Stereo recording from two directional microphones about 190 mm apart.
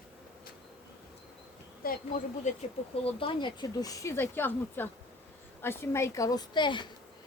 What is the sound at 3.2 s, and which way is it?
Speech, 25° left (ahead or behind).